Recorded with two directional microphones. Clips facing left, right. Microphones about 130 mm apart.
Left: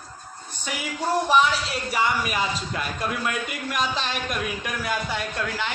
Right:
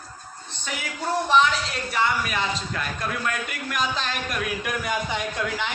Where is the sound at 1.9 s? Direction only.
15° left (ahead or behind).